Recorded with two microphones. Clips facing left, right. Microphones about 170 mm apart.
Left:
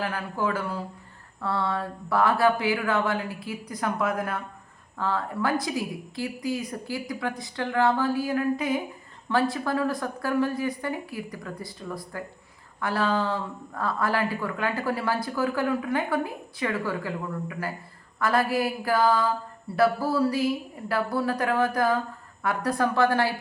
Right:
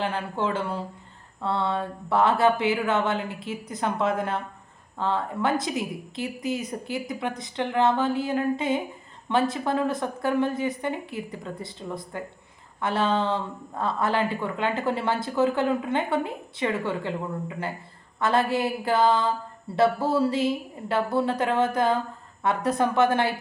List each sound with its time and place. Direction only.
0.0 s speech: 25° right (ahead or behind)